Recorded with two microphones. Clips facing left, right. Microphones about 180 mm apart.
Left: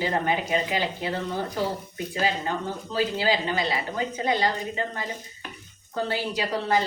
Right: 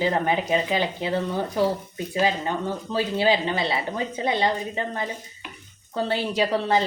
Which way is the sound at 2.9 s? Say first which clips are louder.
Right 2 dB; 25° right (ahead or behind).